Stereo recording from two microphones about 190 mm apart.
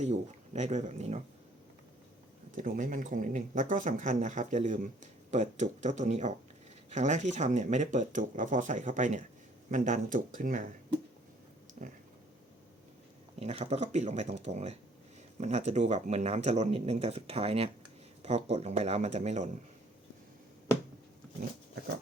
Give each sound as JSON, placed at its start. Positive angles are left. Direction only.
{"t": 0.0, "sound": "speech", "side_deg": -35}
{"t": 2.6, "sound": "speech", "side_deg": -45}
{"t": 11.8, "sound": "a sound", "side_deg": -45}
{"t": 13.4, "sound": "speech", "side_deg": -35}